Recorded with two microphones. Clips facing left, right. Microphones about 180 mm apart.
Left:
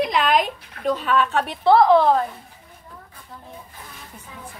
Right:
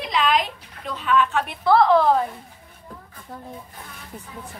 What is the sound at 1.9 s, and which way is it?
Speech, centre (ahead or behind).